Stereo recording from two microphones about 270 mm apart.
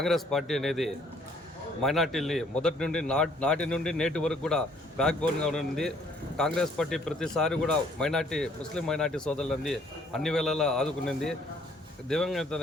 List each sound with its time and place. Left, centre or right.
0.0 s a man's voice: centre